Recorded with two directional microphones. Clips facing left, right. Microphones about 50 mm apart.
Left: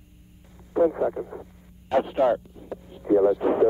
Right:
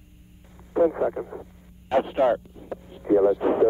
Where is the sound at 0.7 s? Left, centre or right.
Right.